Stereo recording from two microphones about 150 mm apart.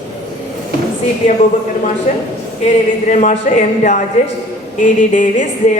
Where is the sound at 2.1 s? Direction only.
50° left (ahead or behind).